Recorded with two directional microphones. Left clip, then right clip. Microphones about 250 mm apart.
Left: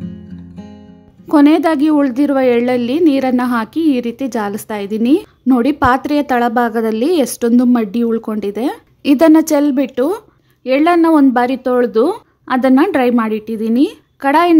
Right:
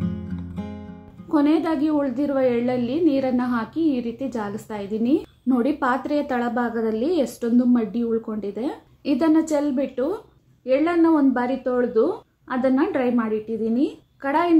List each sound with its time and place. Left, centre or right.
1.3 s a woman's voice: left